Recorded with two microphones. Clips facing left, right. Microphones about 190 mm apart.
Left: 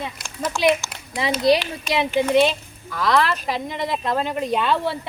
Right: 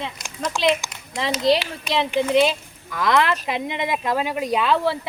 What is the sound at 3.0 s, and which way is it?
Speech, 20° right (ahead or behind).